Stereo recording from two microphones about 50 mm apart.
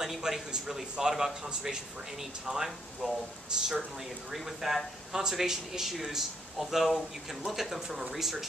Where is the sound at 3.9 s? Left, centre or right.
Centre.